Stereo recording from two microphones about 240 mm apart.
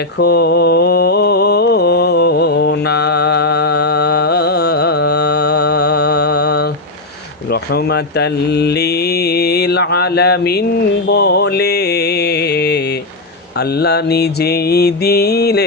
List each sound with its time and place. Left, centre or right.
0.2 s mantra: left